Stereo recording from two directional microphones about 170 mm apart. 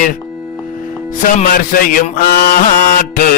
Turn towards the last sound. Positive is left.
turn(degrees=55)  # may be behind; listen again after turning